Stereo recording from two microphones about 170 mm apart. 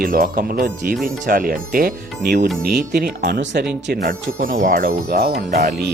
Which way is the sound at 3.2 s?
65° right (ahead or behind).